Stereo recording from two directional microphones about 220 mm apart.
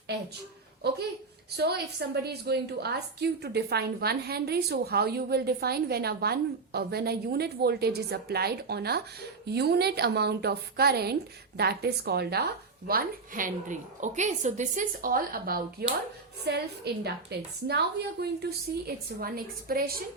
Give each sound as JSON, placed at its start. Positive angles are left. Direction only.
{"t": 0.8, "sound": "a woman's voice", "side_deg": -45}